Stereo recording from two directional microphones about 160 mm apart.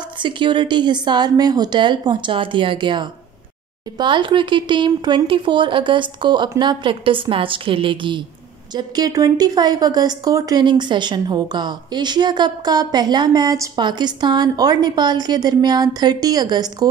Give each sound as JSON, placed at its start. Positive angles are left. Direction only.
{"t": 0.2, "sound": "speech", "side_deg": -30}